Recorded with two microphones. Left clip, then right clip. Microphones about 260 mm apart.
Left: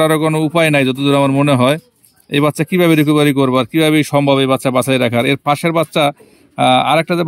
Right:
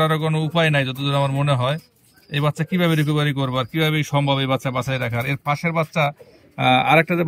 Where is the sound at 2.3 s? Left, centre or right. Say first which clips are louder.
Left 9 dB; left.